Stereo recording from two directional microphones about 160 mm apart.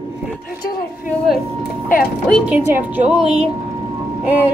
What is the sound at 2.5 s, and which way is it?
Speech, 10° right (ahead or behind).